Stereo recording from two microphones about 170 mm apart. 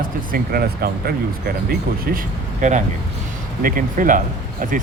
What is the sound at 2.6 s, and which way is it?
Speech, 45° right (ahead or behind).